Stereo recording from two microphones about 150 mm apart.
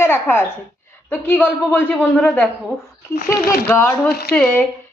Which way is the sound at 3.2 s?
75° left (ahead or behind).